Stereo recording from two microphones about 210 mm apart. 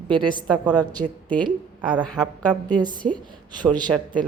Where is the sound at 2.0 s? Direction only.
5° left (ahead or behind).